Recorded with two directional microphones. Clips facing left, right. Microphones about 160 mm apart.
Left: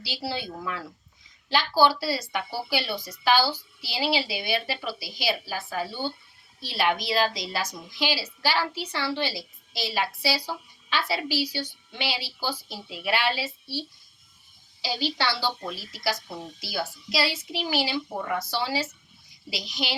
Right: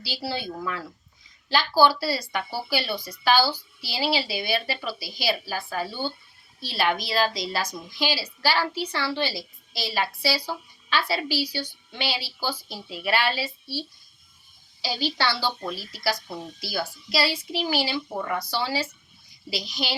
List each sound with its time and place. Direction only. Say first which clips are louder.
0.0 s a woman's voice: right 1 dB; 20° left (ahead or behind)